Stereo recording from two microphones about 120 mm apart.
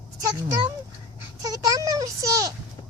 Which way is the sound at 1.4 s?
30° right (ahead or behind).